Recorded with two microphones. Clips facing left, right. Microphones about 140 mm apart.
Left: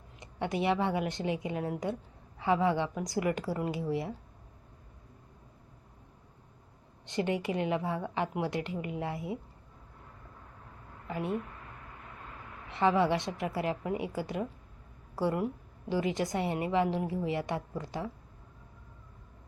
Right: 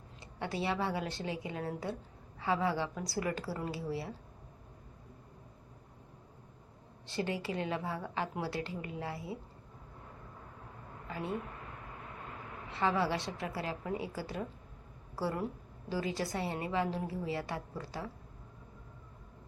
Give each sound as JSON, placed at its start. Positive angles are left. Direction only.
{"t": 0.2, "sound": "a woman's voice", "side_deg": 20}
{"t": 7.1, "sound": "a woman's voice", "side_deg": 20}
{"t": 11.1, "sound": "speech", "side_deg": 20}
{"t": 12.7, "sound": "a woman's voice", "side_deg": 20}